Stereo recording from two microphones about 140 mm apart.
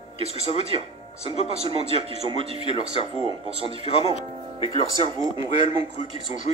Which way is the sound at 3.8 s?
45° left (ahead or behind).